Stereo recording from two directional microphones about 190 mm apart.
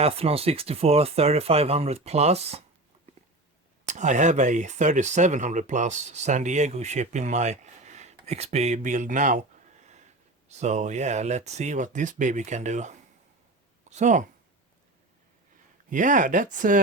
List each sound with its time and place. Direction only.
0.0 s speech: 30° right (ahead or behind)
3.8 s speech: 40° right (ahead or behind)
9.8 s a sound: 35° right (ahead or behind)
10.5 s speech: 35° right (ahead or behind)
15.9 s speech: 40° right (ahead or behind)